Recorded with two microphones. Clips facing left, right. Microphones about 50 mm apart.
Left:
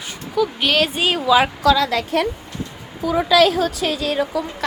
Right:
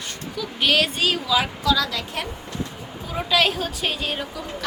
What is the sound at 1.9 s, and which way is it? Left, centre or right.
Speech, left.